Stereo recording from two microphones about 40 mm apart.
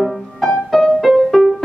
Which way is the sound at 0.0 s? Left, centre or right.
Centre.